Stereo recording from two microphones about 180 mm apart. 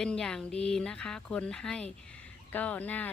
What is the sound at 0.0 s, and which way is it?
Speech, 5° left (ahead or behind).